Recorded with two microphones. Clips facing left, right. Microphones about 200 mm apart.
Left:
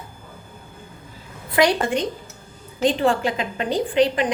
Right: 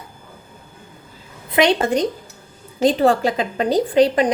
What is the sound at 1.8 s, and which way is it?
A woman's voice, 40° right (ahead or behind).